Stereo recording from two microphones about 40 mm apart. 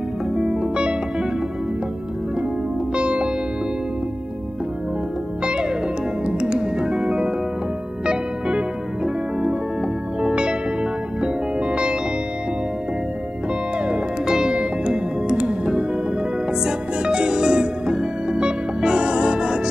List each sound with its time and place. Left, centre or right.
0.4 s music: centre
3.0 s music: right
5.4 s music: right
7.0 s music: centre
8.0 s music: right
14.2 s music: centre